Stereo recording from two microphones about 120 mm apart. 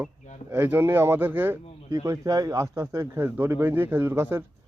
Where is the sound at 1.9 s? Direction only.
30° right (ahead or behind).